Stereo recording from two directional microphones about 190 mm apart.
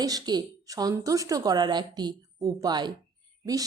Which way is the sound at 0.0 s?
20° right (ahead or behind).